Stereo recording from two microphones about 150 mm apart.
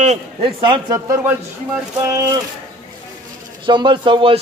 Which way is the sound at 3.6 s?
30° right (ahead or behind).